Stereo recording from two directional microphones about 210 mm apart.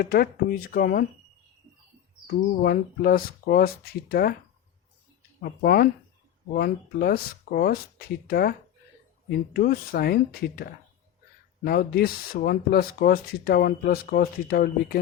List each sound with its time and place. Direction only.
0.0 s speech: 45° left (ahead or behind)
2.2 s speech: 45° left (ahead or behind)
5.4 s speech: 45° left (ahead or behind)